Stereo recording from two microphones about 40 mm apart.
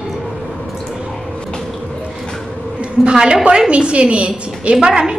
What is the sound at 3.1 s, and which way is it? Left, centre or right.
A woman's voice, right.